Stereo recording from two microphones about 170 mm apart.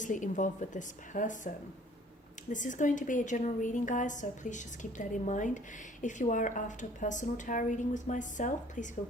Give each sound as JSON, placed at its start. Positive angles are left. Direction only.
{"t": 0.0, "sound": "a woman's voice", "side_deg": 50}